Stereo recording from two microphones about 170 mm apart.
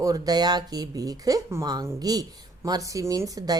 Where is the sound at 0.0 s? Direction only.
20° right (ahead or behind).